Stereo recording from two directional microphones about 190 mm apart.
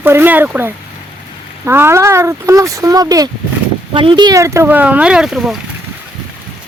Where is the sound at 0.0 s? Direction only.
10° right (ahead or behind).